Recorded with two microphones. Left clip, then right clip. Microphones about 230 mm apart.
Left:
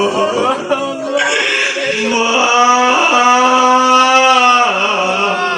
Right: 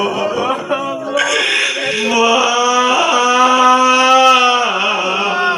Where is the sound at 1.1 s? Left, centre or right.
Right.